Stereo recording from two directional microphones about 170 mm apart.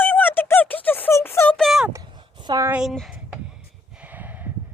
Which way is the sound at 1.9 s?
25° right (ahead or behind).